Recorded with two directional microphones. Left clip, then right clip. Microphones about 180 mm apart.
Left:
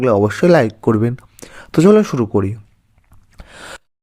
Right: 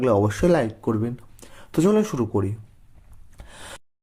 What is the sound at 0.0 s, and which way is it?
Speech, 30° left (ahead or behind).